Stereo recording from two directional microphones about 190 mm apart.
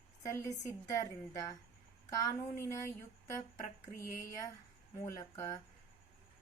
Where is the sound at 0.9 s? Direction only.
20° left (ahead or behind).